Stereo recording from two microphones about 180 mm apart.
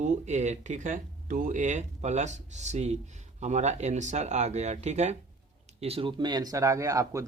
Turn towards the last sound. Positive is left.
turn(degrees=-20)  # may be behind; listen again after turning